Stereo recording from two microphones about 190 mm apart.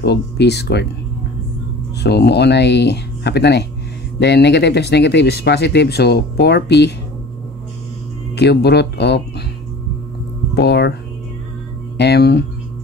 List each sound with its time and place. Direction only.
0.0 s speech: 60° left (ahead or behind)
2.0 s speech: 60° left (ahead or behind)
8.4 s speech: 60° left (ahead or behind)
10.5 s speech: 60° left (ahead or behind)
12.0 s speech: 60° left (ahead or behind)